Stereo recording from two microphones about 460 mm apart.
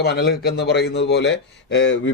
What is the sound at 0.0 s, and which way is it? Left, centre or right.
Speech, left.